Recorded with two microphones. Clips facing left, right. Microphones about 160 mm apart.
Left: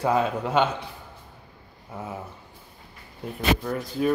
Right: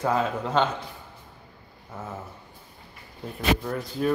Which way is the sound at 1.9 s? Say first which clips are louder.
Left 2 dB; 15° left (ahead or behind).